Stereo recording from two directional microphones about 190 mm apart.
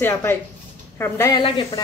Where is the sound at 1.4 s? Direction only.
25° left (ahead or behind).